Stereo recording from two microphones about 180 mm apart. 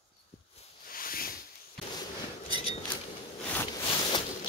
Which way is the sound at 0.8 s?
55° left (ahead or behind).